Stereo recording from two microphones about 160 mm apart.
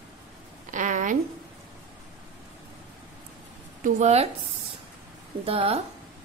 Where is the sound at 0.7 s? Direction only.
55° right (ahead or behind).